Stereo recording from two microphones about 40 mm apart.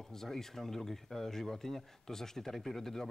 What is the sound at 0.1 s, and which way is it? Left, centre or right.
A man's voice, centre.